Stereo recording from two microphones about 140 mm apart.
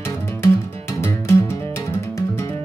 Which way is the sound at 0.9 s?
15° left (ahead or behind).